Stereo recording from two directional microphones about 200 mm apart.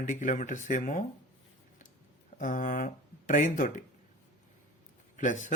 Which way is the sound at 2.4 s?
40° left (ahead or behind).